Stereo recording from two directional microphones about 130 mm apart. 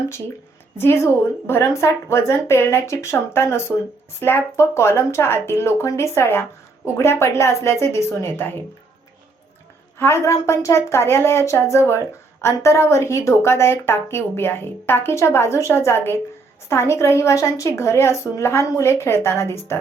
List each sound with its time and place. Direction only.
0.8 s a woman's voice: 20° left (ahead or behind)
10.0 s a woman's voice: 20° left (ahead or behind)